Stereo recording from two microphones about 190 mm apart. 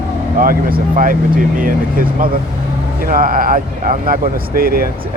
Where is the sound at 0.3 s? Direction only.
50° right (ahead or behind).